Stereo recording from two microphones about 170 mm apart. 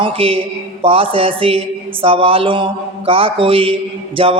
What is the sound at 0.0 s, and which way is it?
Speech, 35° right (ahead or behind).